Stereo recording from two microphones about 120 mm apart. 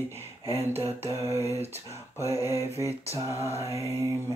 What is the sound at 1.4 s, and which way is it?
Speech, 60° right (ahead or behind).